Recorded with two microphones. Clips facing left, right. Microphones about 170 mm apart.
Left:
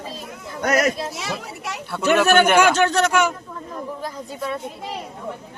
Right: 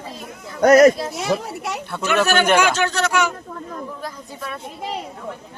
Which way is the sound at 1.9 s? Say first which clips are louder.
Left 5 dB; 5° left (ahead or behind).